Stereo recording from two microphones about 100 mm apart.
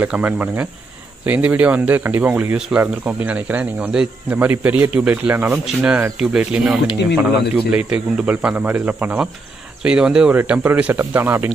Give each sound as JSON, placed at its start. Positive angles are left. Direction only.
{"t": 0.0, "sound": "speech", "side_deg": -15}
{"t": 2.5, "sound": "speech", "side_deg": -10}
{"t": 5.1, "sound": "speech", "side_deg": -20}
{"t": 6.1, "sound": "speech", "side_deg": -5}